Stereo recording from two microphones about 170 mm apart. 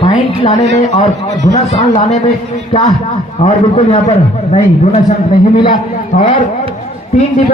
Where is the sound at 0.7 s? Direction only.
40° left (ahead or behind).